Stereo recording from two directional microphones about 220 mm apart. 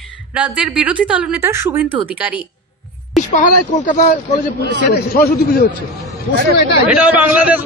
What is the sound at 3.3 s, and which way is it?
A man's voice, 35° left (ahead or behind).